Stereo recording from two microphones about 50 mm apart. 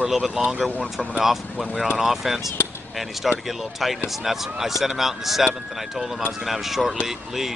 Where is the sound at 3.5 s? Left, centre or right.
Centre.